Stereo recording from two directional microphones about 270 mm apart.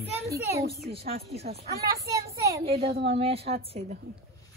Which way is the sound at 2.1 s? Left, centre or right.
Centre.